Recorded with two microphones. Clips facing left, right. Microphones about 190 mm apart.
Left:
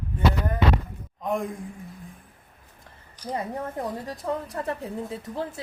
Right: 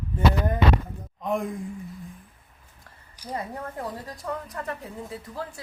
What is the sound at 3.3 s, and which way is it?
Speech, 25° left (ahead or behind).